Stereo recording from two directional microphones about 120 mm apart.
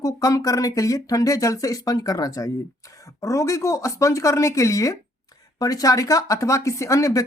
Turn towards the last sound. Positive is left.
turn(degrees=30)  # may be behind; listen again after turning